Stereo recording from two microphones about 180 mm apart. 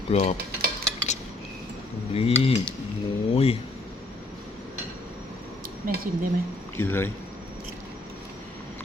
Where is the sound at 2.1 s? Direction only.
35° left (ahead or behind).